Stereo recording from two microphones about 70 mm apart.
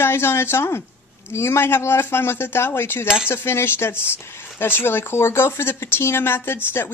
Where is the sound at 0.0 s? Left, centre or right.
Left.